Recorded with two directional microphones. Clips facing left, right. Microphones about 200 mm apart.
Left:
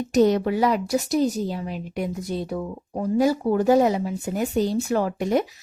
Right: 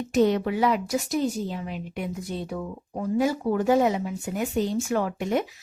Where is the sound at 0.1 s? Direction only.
40° left (ahead or behind).